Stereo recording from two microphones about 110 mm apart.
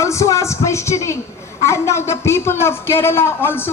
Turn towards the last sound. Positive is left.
turn(degrees=20)  # may be behind; listen again after turning